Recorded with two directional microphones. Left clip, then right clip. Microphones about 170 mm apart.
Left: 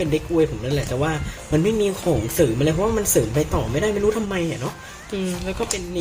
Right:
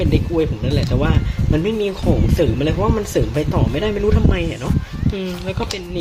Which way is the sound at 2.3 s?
15° right (ahead or behind).